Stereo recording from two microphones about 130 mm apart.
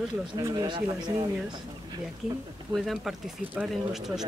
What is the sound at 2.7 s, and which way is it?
Speech, centre (ahead or behind).